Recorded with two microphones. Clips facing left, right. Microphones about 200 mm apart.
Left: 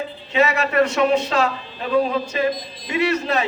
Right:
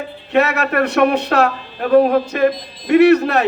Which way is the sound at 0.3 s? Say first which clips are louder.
Right 2 dB; 60° right (ahead or behind).